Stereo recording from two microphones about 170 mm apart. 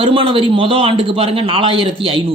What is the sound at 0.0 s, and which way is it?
A man's voice, 30° right (ahead or behind).